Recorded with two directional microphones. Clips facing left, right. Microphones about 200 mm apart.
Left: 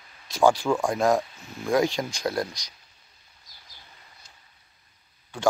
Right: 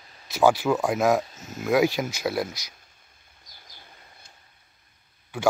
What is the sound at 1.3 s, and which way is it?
Speech, 40° right (ahead or behind).